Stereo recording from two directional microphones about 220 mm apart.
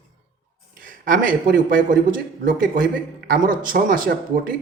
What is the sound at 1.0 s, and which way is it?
Speech, 40° right (ahead or behind).